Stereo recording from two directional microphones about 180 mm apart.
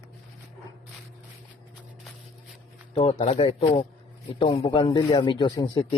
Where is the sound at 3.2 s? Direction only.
35° left (ahead or behind).